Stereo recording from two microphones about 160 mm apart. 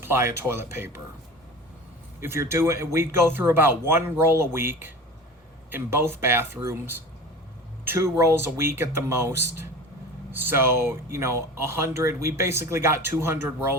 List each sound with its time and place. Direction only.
0.0 s speech: 15° right (ahead or behind)
2.2 s speech: 15° right (ahead or behind)